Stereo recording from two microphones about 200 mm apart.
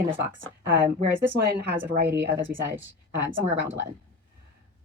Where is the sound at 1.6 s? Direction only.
55° right (ahead or behind).